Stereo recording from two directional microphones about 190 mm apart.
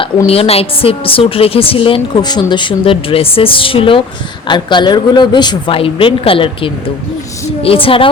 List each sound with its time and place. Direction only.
0.0 s a woman's voice: 30° left (ahead or behind)